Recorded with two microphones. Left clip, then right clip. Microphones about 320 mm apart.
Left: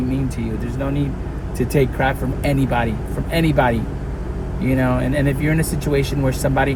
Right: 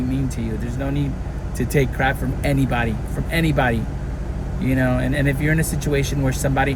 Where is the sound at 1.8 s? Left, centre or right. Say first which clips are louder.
Left 2 dB; centre.